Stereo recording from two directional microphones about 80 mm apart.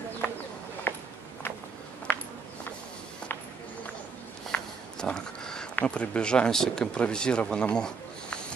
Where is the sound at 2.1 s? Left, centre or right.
Left.